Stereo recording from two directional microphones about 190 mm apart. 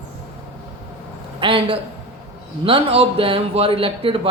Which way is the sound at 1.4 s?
30° right (ahead or behind).